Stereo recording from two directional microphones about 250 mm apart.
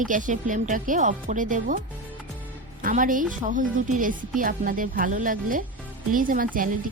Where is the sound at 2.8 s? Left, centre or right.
Right.